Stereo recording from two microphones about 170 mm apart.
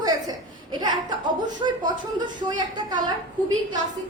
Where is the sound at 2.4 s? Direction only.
25° right (ahead or behind).